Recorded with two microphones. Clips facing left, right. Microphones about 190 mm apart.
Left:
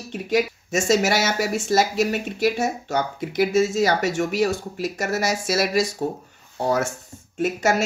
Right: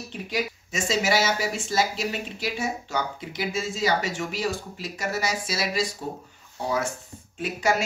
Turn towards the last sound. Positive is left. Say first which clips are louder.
# left 4 dB
turn(degrees=45)  # may be behind; listen again after turning